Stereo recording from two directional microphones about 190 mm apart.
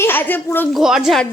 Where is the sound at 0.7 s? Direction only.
Centre (ahead or behind).